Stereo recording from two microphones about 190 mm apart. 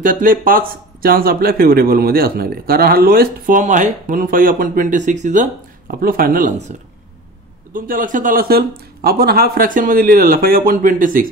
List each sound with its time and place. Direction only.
0.0 s speech: 45° right (ahead or behind)
7.7 s speech: 45° right (ahead or behind)